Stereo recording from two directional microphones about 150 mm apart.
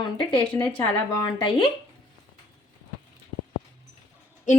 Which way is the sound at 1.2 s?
30° left (ahead or behind).